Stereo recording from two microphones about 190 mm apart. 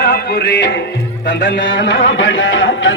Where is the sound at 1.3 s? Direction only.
70° left (ahead or behind); by 2.9 s 90° left.